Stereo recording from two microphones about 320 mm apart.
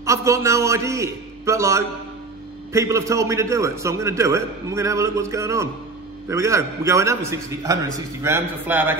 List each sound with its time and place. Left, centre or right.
0.0 s a man's voice: centre